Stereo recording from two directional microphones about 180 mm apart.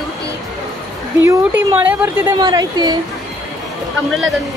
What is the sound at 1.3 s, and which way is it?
Speech, 10° right (ahead or behind).